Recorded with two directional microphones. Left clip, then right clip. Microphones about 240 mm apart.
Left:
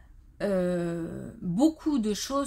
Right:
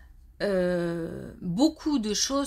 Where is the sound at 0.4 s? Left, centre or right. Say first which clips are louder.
Right 2 dB; right.